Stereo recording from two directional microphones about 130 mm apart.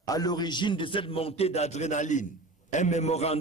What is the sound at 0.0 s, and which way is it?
A man's voice, 30° left (ahead or behind).